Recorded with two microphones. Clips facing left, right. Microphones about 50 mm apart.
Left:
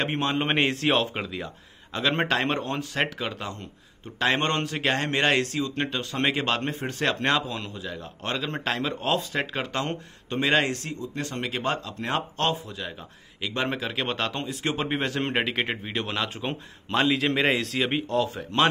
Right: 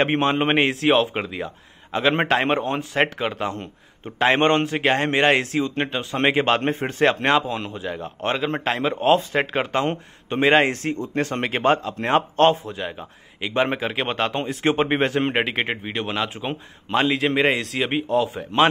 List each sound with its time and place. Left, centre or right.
0.0 s speech: right
0.6 s a man's voice: centre
1.2 s speech: centre
11.0 s speech: right
14.4 s speech: right
15.2 s a man's voice: centre